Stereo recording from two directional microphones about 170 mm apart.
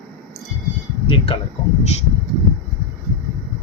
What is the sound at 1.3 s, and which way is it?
Speech, 30° left (ahead or behind).